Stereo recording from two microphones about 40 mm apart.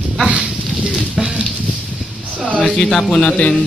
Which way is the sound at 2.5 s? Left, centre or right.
Left.